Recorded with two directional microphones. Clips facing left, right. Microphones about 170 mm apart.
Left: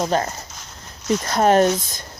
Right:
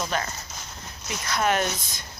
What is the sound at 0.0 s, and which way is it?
Speech, 35° left (ahead or behind).